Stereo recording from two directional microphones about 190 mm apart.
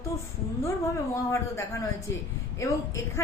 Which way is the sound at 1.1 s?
15° left (ahead or behind).